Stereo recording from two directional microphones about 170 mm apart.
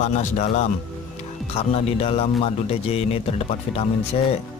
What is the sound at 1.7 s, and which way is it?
A man's voice, 35° left (ahead or behind).